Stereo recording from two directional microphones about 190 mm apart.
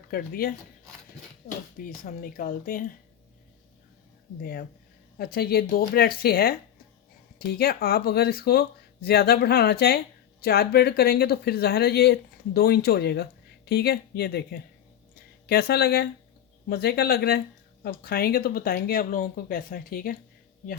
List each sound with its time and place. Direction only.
0.1 s speech: 50° left (ahead or behind)
1.8 s speech: 45° left (ahead or behind)
4.4 s speech: 55° left (ahead or behind)